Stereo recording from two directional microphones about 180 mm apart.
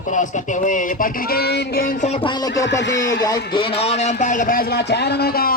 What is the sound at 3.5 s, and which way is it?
Speech, 30° left (ahead or behind).